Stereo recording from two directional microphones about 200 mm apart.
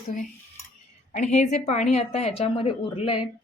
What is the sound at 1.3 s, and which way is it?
Speech, 35° left (ahead or behind).